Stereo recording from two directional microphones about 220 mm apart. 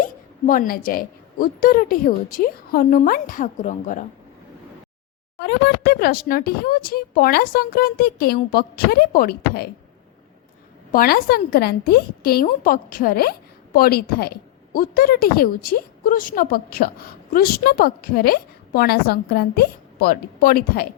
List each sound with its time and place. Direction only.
0.0 s a woman's voice: 40° left (ahead or behind)
5.4 s a woman's voice: 50° left (ahead or behind)
10.9 s a woman's voice: 40° left (ahead or behind)